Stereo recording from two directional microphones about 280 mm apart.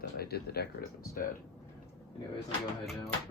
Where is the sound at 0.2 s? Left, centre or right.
Left.